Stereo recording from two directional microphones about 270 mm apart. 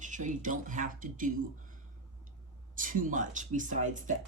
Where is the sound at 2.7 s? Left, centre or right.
Right.